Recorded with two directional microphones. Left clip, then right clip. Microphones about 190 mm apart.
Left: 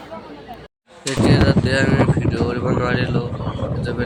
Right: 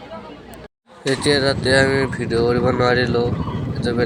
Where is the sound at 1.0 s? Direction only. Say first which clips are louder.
Right 1 dB; 20° right (ahead or behind).